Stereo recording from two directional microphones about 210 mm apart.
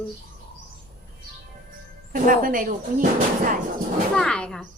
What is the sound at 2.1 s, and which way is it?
Speech, 40° right (ahead or behind).